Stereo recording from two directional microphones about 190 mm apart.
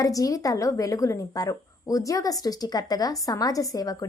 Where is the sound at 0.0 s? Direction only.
20° left (ahead or behind).